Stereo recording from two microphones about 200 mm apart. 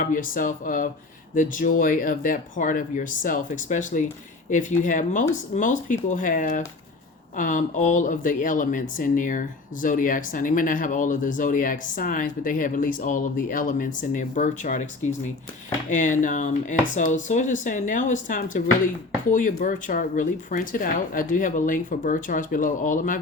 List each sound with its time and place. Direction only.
0.0 s speech: 40° left (ahead or behind)